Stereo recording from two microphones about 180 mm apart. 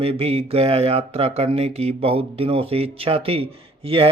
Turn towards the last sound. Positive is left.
turn(degrees=-30)  # may be behind; listen again after turning